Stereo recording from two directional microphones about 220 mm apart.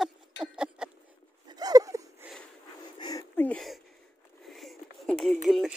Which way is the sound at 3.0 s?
15° left (ahead or behind).